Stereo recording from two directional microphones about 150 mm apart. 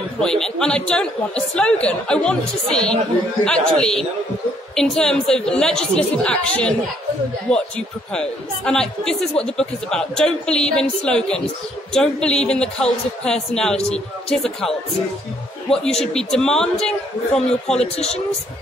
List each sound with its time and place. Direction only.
0.2 s speech: 5° left (ahead or behind)
15.7 s speech: 5° left (ahead or behind)
17.9 s speech: 45° left (ahead or behind)